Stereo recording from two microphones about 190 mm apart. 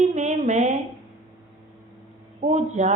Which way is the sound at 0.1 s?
40° right (ahead or behind).